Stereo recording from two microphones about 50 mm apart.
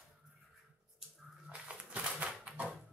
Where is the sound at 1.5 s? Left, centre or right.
Right.